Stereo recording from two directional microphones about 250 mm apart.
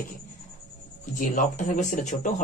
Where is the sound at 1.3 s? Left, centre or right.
Left.